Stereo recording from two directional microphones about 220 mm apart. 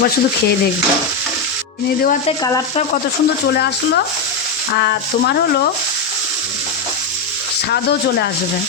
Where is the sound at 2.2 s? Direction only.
20° left (ahead or behind).